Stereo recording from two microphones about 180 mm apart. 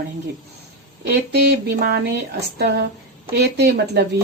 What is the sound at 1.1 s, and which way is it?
Speech, 70° right (ahead or behind).